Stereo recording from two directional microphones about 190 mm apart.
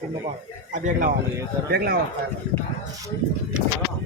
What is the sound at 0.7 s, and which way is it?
Speech, 45° right (ahead or behind).